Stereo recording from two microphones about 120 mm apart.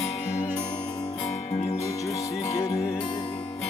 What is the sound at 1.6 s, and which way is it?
Music, 55° left (ahead or behind).